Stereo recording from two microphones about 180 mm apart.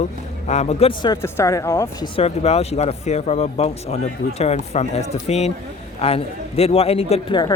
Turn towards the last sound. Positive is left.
turn(degrees=25)  # may be behind; listen again after turning